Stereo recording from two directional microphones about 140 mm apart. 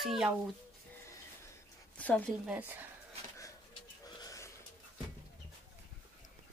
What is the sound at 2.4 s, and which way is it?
Speech, 10° right (ahead or behind).